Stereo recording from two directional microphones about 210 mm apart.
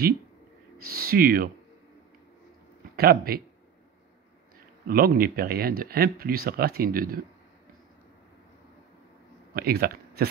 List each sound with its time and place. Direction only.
0.8 s speech: 45° right (ahead or behind)
3.0 s speech: 45° right (ahead or behind)
4.8 s speech: 45° right (ahead or behind)
9.5 s speech: 45° right (ahead or behind)